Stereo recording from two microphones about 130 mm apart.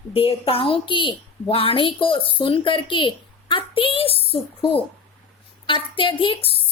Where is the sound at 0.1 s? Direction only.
45° left (ahead or behind).